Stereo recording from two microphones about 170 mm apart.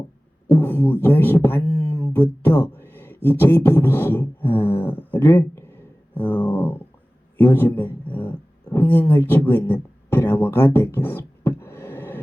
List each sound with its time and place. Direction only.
0.5 s beatboxing: 10° left (ahead or behind)
2.1 s speech: 10° left (ahead or behind)
2.6 s a sound: 10° left (ahead or behind)
3.2 s beatboxing: 10° left (ahead or behind)
7.3 s speech: 10° left (ahead or behind)